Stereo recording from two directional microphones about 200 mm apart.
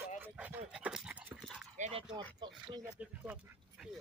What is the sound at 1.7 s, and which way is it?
Dog, 35° right (ahead or behind).